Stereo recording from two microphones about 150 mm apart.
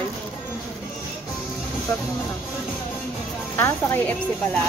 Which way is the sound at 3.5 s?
15° left (ahead or behind).